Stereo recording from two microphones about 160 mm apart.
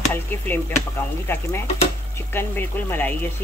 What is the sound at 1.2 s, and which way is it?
Speech, 15° left (ahead or behind).